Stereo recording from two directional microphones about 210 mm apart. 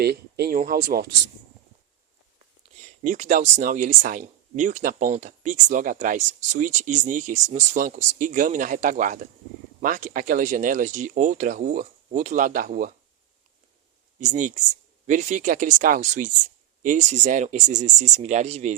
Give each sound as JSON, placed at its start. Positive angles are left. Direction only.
{"t": 0.0, "sound": "speech", "side_deg": -50}
{"t": 3.0, "sound": "speech", "side_deg": -35}
{"t": 14.2, "sound": "speech", "side_deg": -35}